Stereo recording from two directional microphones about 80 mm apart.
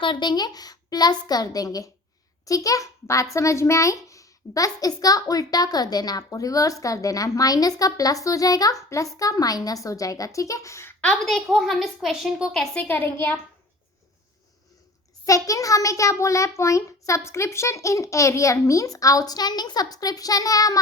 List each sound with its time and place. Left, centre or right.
0.0 s a woman's voice: left
11.3 s a woman's voice: centre
12.9 s a child's voice: left
15.4 s a child's voice: left